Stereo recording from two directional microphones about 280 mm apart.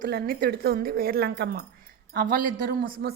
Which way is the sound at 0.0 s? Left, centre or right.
Right.